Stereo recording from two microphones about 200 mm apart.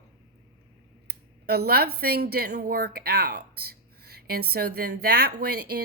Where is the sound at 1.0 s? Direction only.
50° right (ahead or behind).